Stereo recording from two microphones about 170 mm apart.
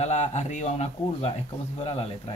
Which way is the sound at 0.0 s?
40° left (ahead or behind).